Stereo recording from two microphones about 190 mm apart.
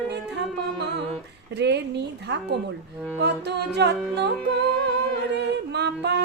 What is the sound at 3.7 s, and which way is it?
A capella, 65° right (ahead or behind).